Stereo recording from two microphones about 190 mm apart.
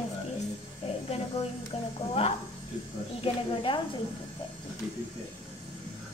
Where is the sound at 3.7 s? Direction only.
25° left (ahead or behind).